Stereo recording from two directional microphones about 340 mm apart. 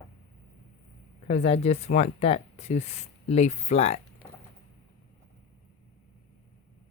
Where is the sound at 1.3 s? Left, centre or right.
Centre.